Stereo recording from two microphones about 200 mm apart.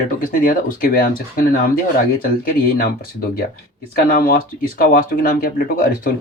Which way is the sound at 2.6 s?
45° left (ahead or behind).